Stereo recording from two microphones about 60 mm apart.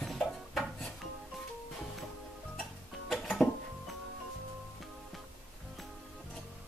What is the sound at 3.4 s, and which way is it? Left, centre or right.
Music, left.